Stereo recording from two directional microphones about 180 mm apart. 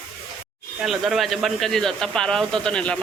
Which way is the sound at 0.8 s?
Centre (ahead or behind).